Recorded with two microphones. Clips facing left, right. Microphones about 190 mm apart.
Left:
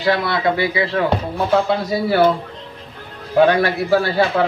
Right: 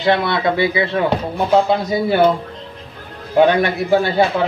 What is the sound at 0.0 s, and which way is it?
A man's voice, 25° right (ahead or behind).